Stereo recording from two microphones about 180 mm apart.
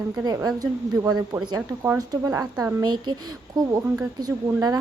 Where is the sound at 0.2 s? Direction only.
20° right (ahead or behind).